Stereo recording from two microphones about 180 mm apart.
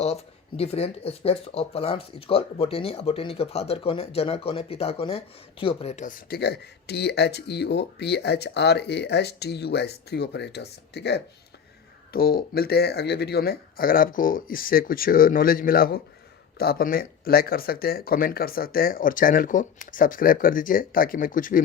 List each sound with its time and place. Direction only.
0.0 s speech: 35° left (ahead or behind)